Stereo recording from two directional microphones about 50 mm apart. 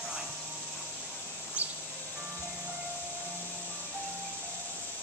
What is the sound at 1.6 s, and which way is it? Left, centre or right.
Music, right.